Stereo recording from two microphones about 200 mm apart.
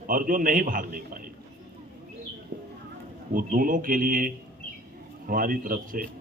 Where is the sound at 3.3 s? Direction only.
45° right (ahead or behind).